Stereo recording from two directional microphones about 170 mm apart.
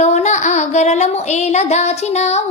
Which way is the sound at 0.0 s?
45° left (ahead or behind).